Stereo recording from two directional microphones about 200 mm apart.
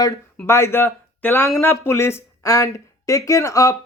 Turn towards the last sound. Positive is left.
turn(degrees=15)  # may be behind; listen again after turning